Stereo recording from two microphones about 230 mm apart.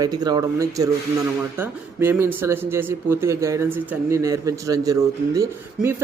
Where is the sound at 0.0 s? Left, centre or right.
Centre.